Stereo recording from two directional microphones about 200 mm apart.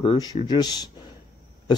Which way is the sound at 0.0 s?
20° left (ahead or behind).